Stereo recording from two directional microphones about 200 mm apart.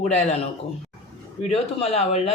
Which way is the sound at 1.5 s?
30° left (ahead or behind).